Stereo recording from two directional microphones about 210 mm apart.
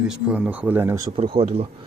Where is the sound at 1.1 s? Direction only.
25° right (ahead or behind).